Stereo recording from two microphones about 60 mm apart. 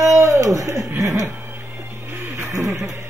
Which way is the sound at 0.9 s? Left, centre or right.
Right.